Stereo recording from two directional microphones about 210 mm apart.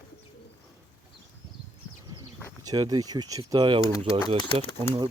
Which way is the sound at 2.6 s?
20° right (ahead or behind).